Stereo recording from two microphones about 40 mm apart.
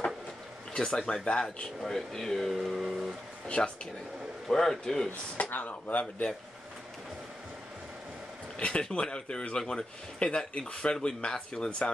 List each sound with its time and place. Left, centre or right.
0.7 s speech: centre
1.9 s speech: centre
2.5 s speech: centre
3.4 s speech: left
4.5 s speech: centre
5.5 s speech: left
8.5 s speech: left